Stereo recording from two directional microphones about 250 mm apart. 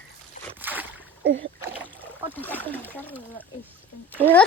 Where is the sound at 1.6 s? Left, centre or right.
Centre.